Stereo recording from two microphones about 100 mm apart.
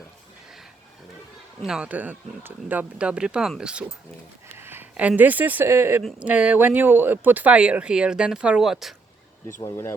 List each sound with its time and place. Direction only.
1.6 s speech: 10° right (ahead or behind)
4.5 s speech: 20° right (ahead or behind)
6.1 s speech: 15° right (ahead or behind)
9.5 s speech: 25° left (ahead or behind)